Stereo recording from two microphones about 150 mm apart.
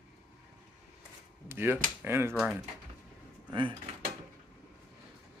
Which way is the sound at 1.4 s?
15° right (ahead or behind).